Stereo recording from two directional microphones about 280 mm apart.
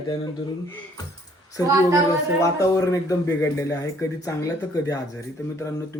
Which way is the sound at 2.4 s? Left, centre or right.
Centre.